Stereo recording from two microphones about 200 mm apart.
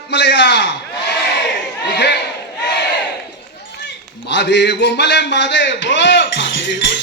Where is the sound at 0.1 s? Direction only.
60° left (ahead or behind).